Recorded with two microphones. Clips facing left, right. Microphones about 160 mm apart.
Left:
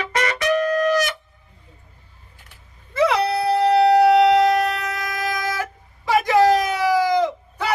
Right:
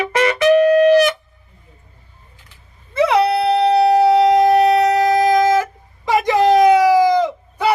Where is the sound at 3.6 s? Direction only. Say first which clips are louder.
Even; 20° right (ahead or behind).